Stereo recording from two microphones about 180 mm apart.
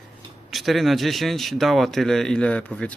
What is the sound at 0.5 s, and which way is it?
Speech, centre (ahead or behind).